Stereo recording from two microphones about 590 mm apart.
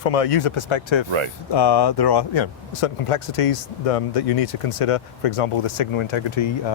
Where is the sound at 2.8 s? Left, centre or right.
Left.